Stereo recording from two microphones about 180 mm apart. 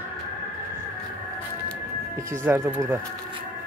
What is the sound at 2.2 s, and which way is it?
Speech, 15° right (ahead or behind).